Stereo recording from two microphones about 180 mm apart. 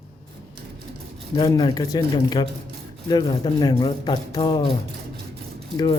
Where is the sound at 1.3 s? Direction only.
20° left (ahead or behind).